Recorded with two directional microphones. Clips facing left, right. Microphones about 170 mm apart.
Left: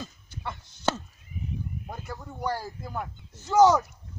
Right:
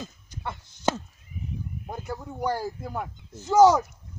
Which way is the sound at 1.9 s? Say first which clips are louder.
Right 4 dB; 15° right (ahead or behind).